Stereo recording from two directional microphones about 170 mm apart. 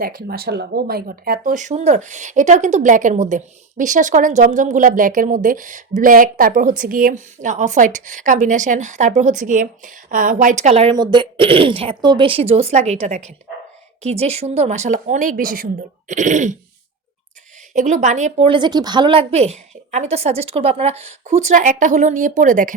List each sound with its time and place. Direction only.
0.0 s speech: 60° right (ahead or behind); by 10.9 s 40° right (ahead or behind)
10.9 s a woman's voice: 25° right (ahead or behind); by 16.6 s 45° right (ahead or behind)
17.7 s a woman's voice: 45° right (ahead or behind)